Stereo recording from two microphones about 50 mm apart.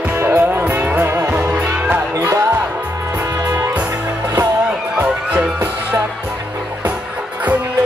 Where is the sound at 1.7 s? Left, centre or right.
Right.